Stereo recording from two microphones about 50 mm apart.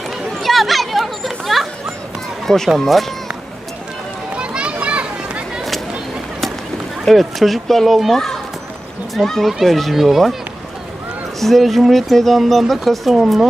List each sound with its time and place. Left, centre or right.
0.4 s a sound: centre
2.7 s speech: centre
4.4 s children playing: right
7.0 s speech: centre
11.3 s speech: centre